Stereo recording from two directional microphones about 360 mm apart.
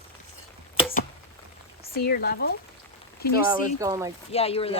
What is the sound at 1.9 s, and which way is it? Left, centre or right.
Speech, left.